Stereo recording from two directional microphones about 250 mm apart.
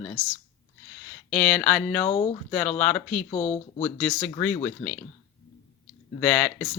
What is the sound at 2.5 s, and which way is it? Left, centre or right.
Speech, centre.